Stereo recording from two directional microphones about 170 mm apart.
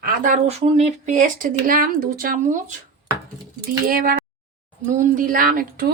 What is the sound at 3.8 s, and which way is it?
Speech, 55° right (ahead or behind).